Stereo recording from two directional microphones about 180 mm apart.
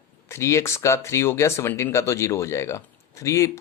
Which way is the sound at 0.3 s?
15° left (ahead or behind).